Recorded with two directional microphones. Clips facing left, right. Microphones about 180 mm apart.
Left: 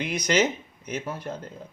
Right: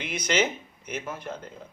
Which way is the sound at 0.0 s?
40° left (ahead or behind).